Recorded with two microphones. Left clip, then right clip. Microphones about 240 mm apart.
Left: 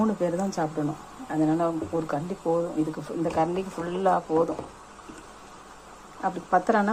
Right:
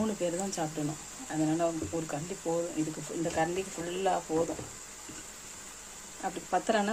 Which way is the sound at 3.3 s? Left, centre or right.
Centre.